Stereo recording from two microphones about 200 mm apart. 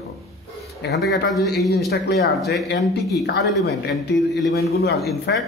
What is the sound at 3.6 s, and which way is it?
A man's voice, 55° left (ahead or behind).